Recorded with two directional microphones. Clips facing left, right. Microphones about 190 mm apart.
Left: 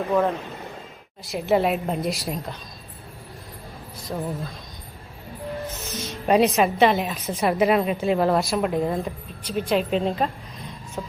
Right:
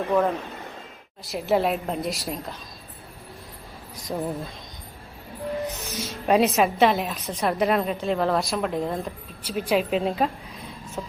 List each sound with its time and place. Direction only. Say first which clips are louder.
0.1 s a woman's voice: even; centre (ahead or behind)
4.1 s music: right 1 dB; 15° right (ahead or behind)
5.6 s music: right 2 dB; 15° right (ahead or behind)
6.2 s a woman's voice: left 1 dB; centre (ahead or behind)